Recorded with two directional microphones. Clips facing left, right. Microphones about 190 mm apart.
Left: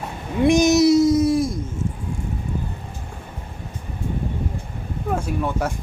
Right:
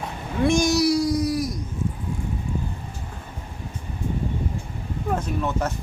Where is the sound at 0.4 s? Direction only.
20° left (ahead or behind).